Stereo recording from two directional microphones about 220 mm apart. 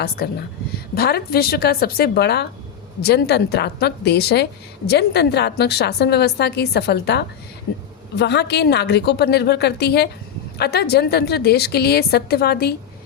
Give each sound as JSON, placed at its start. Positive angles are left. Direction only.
{"t": 0.2, "sound": "a woman's voice", "side_deg": 45}